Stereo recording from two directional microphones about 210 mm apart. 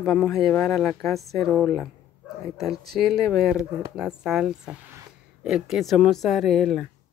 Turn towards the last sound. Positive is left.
turn(degrees=0)  # may be behind; listen again after turning